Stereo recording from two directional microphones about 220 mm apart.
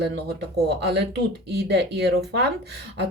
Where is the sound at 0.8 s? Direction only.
50° right (ahead or behind).